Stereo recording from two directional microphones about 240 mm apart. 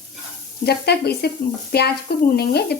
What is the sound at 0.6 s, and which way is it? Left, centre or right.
Speech, left.